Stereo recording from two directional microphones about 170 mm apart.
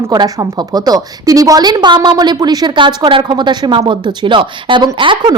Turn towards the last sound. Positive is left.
turn(degrees=-25)  # may be behind; listen again after turning